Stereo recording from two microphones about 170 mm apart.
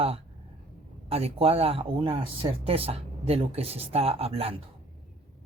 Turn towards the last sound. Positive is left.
turn(degrees=-35)  # may be behind; listen again after turning